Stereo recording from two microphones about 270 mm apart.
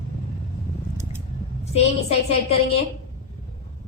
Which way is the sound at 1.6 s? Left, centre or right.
Left.